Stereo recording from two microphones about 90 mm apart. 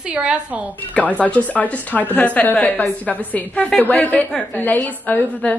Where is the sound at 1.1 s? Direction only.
15° left (ahead or behind).